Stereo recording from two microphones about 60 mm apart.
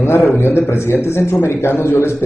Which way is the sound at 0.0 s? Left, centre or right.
Left.